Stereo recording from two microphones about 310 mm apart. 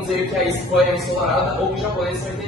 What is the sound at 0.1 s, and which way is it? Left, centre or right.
Speech, centre.